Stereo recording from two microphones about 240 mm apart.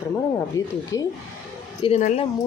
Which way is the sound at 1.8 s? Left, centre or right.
Left.